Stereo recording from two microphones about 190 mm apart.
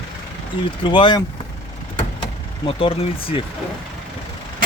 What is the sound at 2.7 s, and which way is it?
Speech, 30° left (ahead or behind).